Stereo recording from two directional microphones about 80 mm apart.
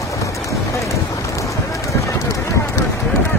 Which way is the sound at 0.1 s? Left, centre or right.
Left.